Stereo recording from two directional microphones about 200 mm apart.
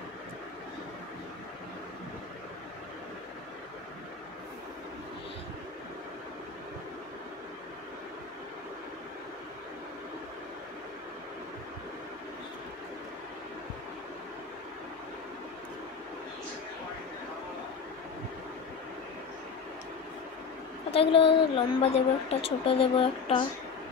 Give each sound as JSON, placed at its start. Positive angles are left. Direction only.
{"t": 20.9, "sound": "a woman's voice", "side_deg": 25}